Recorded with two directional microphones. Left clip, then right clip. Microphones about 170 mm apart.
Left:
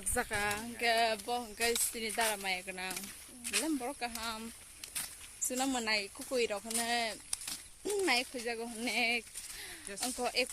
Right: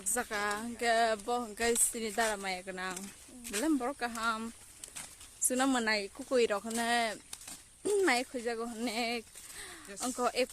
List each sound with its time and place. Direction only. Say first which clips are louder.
0.1 s speech: even; 10° right (ahead or behind)
0.3 s speech: right 1 dB; 25° right (ahead or behind)
3.6 s speech: right 6 dB; 50° right (ahead or behind)
5.5 s speech: right 3 dB; 60° right (ahead or behind)